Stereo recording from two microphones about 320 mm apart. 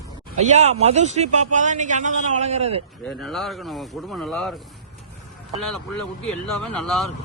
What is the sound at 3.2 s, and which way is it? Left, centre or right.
Speech, centre.